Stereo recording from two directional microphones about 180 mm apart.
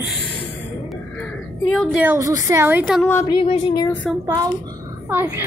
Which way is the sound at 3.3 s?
30° left (ahead or behind).